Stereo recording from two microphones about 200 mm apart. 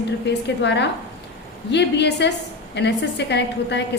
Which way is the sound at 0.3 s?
60° left (ahead or behind).